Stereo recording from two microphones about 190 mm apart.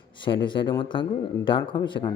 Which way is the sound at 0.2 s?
25° left (ahead or behind).